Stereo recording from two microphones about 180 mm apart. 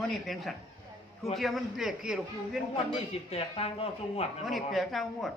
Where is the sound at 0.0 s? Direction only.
Centre (ahead or behind).